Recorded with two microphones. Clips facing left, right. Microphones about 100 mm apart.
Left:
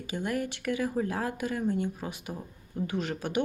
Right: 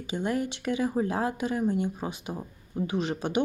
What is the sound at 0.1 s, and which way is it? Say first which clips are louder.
Speech: right 3 dB; 25° right (ahead or behind).